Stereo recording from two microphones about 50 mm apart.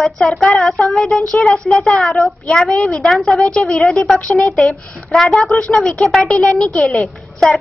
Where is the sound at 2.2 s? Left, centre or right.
Centre.